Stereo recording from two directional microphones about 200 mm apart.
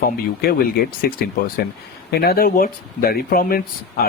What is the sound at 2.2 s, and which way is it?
Speech, 50° left (ahead or behind).